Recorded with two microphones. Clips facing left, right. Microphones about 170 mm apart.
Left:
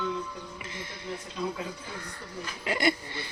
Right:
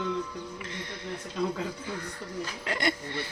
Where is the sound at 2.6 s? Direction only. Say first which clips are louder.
Left 4 dB; 5° left (ahead or behind).